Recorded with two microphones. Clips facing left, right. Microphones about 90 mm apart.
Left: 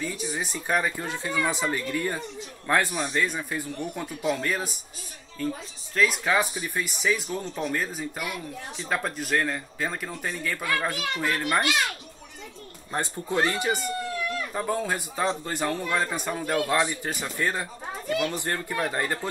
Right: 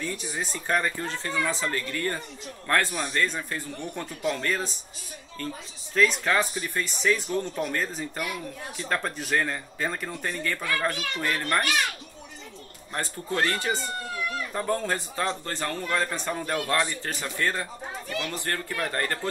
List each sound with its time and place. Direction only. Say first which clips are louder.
0.0 s speech: left 1 dB; 5° left (ahead or behind)
12.9 s speech: left 3 dB; 20° left (ahead or behind)
14.5 s speech: right 1 dB; 5° left (ahead or behind)